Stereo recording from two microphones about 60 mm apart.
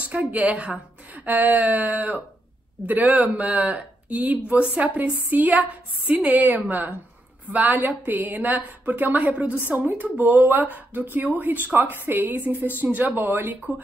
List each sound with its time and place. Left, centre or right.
0.0 s a woman's voice: right